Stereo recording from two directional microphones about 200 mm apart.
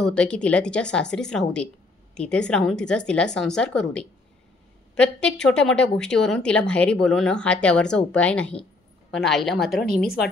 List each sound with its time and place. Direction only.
0.0 s speech: 5° left (ahead or behind)
9.8 s speech: 50° left (ahead or behind)